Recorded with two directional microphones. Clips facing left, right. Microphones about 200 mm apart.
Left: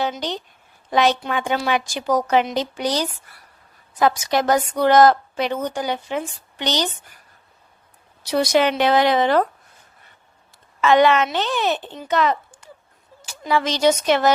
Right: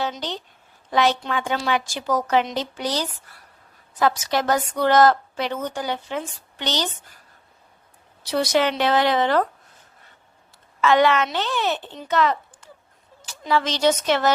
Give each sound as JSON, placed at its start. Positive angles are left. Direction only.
{"t": 0.2, "sound": "speech", "side_deg": 15}
{"t": 8.2, "sound": "speech", "side_deg": 15}
{"t": 10.8, "sound": "a woman's voice", "side_deg": 20}